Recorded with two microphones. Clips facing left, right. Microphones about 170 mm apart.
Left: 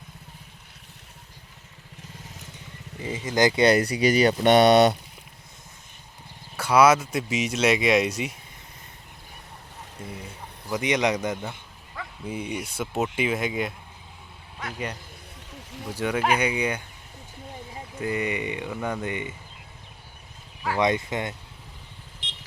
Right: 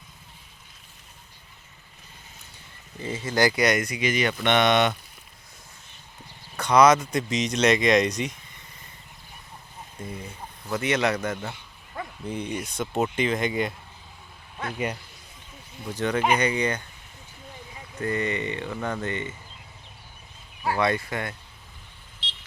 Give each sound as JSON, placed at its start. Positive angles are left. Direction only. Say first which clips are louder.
{"t": 2.1, "sound": "vehicle", "louder": "left 6 dB", "side_deg": 90}
{"t": 3.0, "sound": "speech", "louder": "left 1 dB", "side_deg": 15}
{"t": 6.6, "sound": "speech", "louder": "even", "side_deg": 5}
{"t": 10.0, "sound": "speech", "louder": "right 2 dB", "side_deg": 5}
{"t": 10.7, "sound": "speech", "louder": "left 1 dB", "side_deg": 15}
{"t": 15.9, "sound": "speech", "louder": "right 1 dB", "side_deg": 10}
{"t": 18.0, "sound": "speech", "louder": "even", "side_deg": 10}
{"t": 20.7, "sound": "speech", "louder": "left 2 dB", "side_deg": 20}